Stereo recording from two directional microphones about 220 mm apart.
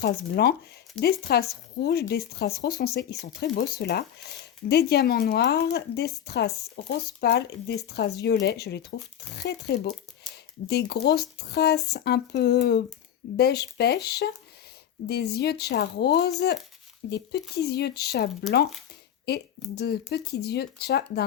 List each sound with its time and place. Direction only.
0.0 s speech: 45° left (ahead or behind)